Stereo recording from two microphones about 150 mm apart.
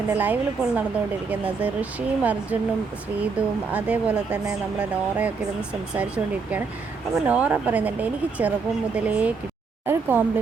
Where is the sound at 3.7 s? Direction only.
10° right (ahead or behind).